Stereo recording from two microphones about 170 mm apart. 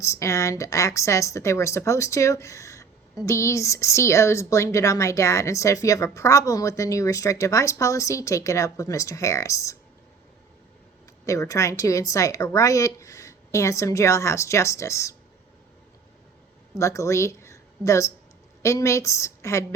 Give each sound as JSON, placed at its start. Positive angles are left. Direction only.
{"t": 0.0, "sound": "a woman's voice", "side_deg": 20}
{"t": 11.3, "sound": "a woman's voice", "side_deg": 20}
{"t": 16.7, "sound": "a woman's voice", "side_deg": 15}